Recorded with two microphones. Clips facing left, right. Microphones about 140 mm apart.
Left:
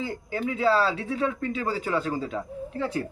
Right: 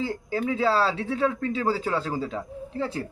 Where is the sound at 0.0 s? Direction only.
30° right (ahead or behind).